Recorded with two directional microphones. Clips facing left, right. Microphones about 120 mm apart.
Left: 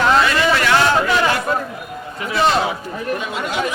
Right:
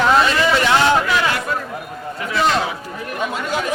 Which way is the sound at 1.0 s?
25° left (ahead or behind).